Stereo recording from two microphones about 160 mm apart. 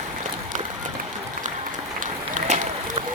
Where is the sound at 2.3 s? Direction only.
50° right (ahead or behind).